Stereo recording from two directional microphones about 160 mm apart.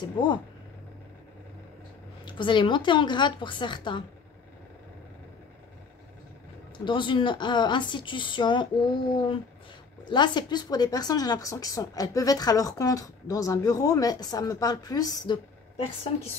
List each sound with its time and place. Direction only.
0.0 s a woman's voice: 30° left (ahead or behind)
2.2 s a woman's voice: 30° left (ahead or behind)
6.8 s a woman's voice: 30° left (ahead or behind)
10.0 s a woman's voice: 30° left (ahead or behind)